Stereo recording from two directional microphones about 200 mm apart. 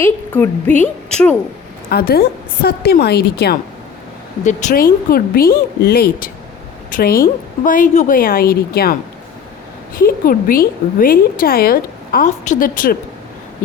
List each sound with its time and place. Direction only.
0.0 s a woman's voice: 10° left (ahead or behind)
1.9 s a woman's voice: 50° left (ahead or behind)